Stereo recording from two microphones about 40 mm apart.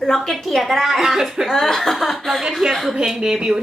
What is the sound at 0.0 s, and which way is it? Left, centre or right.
A woman's voice, centre.